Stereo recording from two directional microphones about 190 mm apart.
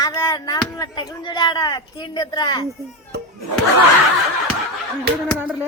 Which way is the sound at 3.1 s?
60° right (ahead or behind).